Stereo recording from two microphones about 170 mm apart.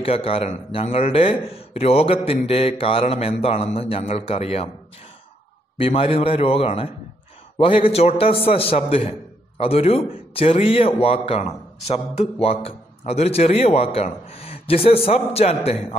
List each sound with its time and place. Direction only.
0.0 s a man's voice: 35° left (ahead or behind)
5.8 s a man's voice: 35° left (ahead or behind)